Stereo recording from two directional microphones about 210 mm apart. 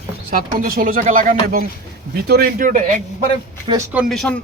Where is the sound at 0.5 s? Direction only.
45° right (ahead or behind).